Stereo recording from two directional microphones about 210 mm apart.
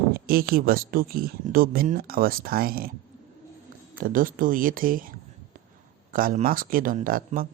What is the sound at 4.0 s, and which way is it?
Speech, 40° right (ahead or behind).